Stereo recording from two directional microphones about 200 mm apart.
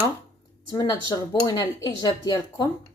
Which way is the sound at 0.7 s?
20° left (ahead or behind).